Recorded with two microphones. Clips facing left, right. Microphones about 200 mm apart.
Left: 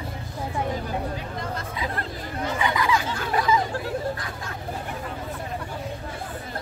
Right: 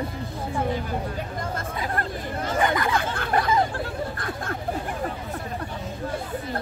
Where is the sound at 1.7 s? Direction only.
50° right (ahead or behind).